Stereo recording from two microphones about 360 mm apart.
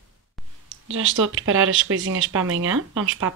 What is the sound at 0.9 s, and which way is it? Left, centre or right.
Speech, right.